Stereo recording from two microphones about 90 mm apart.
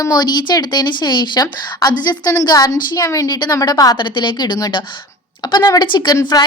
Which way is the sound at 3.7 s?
40° left (ahead or behind).